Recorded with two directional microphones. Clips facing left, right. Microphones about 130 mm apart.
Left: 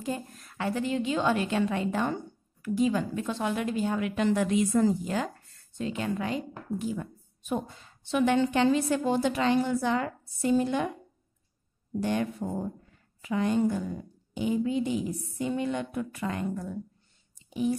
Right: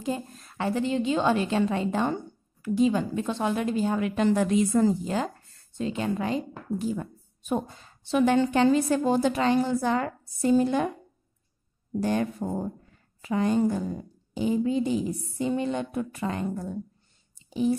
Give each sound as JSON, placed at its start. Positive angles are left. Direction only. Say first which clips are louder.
{"t": 0.0, "sound": "a woman's voice", "louder": "right 3 dB", "side_deg": -25}
{"t": 12.0, "sound": "a woman's voice", "louder": "right 2 dB", "side_deg": -40}
{"t": 17.5, "sound": "whispering", "louder": "right 3 dB", "side_deg": -30}